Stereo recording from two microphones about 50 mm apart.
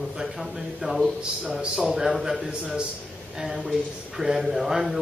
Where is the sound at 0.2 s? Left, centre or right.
Centre.